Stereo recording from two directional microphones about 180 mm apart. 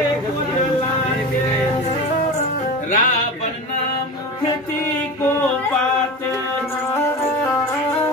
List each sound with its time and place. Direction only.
2.9 s music: 45° left (ahead or behind)